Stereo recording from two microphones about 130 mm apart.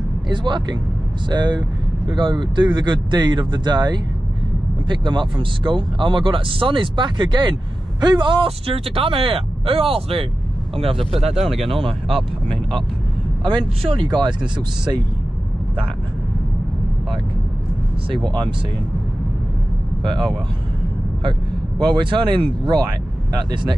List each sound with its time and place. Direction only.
0.3 s speech: 35° right (ahead or behind)
11.2 s speech: centre (ahead or behind)
11.7 s speech: 45° right (ahead or behind)
13.5 s speech: 40° right (ahead or behind)
21.2 s speech: 35° right (ahead or behind)